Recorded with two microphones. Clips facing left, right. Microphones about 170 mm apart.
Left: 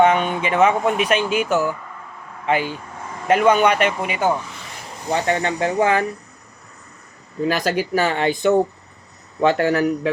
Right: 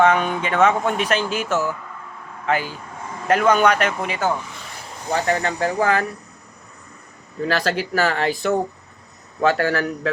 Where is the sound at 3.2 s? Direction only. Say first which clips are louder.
Left 1 dB; 5° left (ahead or behind).